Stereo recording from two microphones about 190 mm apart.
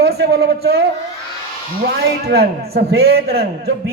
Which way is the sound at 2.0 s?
55° right (ahead or behind).